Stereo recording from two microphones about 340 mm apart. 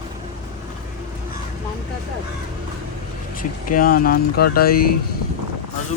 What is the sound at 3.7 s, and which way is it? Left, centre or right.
Speech, left.